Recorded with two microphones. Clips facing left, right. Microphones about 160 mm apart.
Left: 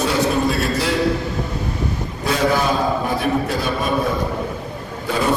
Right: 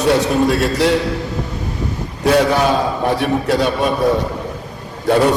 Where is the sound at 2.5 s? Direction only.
75° right (ahead or behind).